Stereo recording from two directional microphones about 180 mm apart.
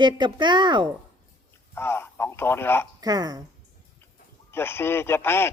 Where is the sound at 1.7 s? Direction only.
10° left (ahead or behind).